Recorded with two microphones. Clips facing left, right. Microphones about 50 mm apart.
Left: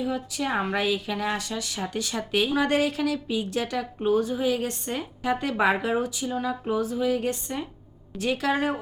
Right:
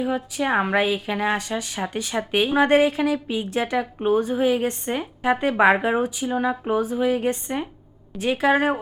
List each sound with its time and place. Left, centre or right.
0.0 s a woman's voice: right